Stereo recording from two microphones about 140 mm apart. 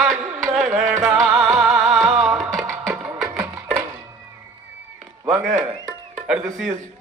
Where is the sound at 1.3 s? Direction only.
5° right (ahead or behind).